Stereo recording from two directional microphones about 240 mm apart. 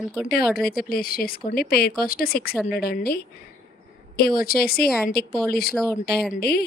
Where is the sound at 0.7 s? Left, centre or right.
Left.